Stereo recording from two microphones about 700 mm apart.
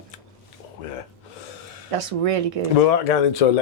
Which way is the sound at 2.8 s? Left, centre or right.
Left.